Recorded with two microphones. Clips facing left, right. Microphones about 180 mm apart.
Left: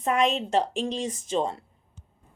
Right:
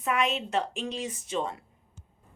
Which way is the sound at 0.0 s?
35° left (ahead or behind).